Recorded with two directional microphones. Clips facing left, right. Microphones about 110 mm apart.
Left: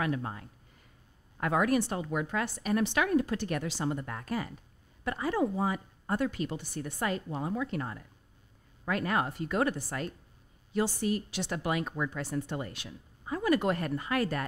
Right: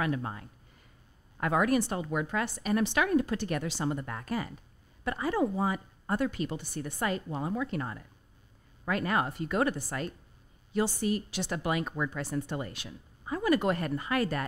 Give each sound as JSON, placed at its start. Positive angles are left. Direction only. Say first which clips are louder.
{"t": 0.0, "sound": "a woman's voice", "louder": "right 1 dB", "side_deg": -15}